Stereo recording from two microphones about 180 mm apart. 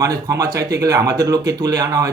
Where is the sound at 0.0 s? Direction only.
20° right (ahead or behind).